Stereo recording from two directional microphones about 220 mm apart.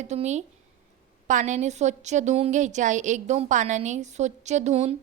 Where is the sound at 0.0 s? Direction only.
30° right (ahead or behind).